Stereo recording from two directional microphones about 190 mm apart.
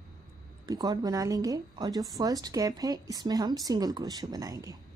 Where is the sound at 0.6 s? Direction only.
20° right (ahead or behind).